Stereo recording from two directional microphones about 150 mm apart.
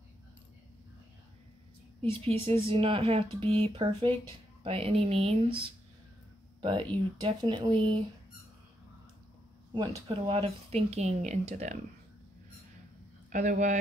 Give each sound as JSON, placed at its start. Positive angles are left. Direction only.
{"t": 2.1, "sound": "speech", "side_deg": -35}
{"t": 9.8, "sound": "speech", "side_deg": -35}
{"t": 13.3, "sound": "speech", "side_deg": -55}